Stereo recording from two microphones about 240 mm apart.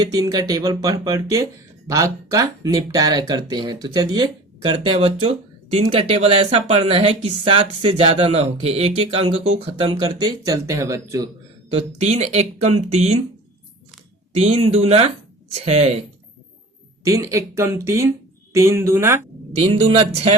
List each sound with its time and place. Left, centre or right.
0.0 s speech: centre
11.7 s speech: right
14.3 s speech: right
17.0 s speech: centre
19.5 s speech: right